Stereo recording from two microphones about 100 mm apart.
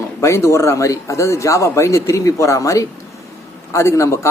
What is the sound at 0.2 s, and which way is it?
A man's voice, 30° left (ahead or behind).